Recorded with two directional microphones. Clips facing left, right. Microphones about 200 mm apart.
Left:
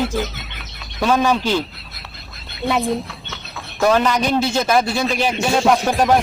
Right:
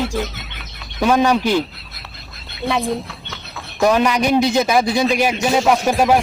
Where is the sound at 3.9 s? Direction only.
10° right (ahead or behind).